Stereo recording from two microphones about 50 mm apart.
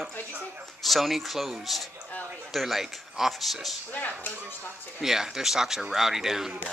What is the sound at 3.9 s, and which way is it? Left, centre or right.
Speech, left.